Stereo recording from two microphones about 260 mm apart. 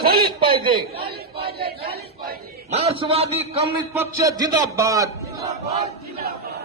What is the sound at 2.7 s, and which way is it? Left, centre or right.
Speech, right.